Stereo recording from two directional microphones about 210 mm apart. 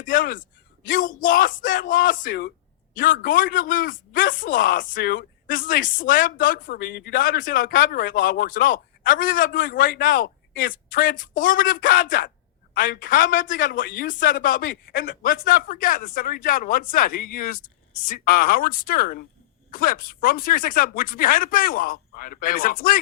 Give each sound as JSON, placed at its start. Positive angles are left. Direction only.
{"t": 0.0, "sound": "speech", "side_deg": 40}